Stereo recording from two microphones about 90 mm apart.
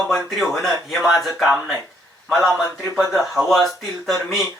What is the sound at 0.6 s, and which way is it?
Speech, centre (ahead or behind).